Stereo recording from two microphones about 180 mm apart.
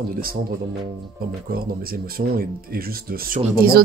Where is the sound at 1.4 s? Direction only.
55° right (ahead or behind).